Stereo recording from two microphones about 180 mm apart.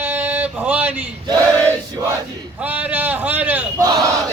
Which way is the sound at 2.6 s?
10° right (ahead or behind).